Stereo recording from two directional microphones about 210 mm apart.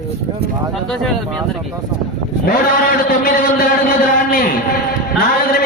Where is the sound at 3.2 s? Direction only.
40° left (ahead or behind).